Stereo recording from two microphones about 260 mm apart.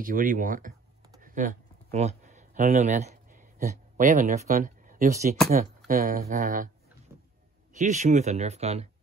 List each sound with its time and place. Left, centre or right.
0.0 s speech: right
1.2 s a sound: right
5.9 s speech: right
7.7 s speech: right